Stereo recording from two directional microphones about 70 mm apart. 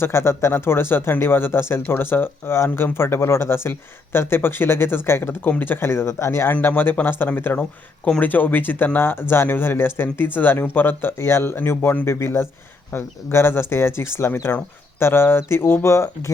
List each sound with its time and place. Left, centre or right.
0.0 s speech: left
6.5 s speech: left
7.6 s speech: centre
8.2 s speech: left